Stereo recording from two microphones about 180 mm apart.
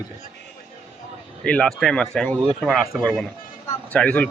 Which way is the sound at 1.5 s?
5° left (ahead or behind).